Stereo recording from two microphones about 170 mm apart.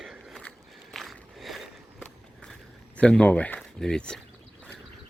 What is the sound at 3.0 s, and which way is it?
Speech, 5° left (ahead or behind).